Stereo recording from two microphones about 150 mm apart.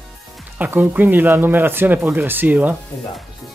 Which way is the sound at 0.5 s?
10° right (ahead or behind).